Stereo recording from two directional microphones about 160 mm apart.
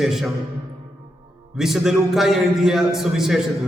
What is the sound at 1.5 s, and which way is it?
A man's voice, 5° right (ahead or behind).